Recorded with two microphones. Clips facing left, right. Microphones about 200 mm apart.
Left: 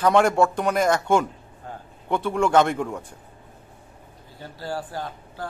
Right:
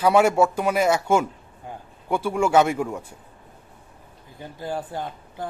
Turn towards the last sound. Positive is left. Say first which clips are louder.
# right 1 dB
turn(degrees=-20)  # may be behind; listen again after turning